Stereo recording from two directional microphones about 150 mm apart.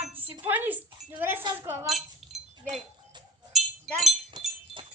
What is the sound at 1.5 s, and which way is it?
Speech, 15° right (ahead or behind).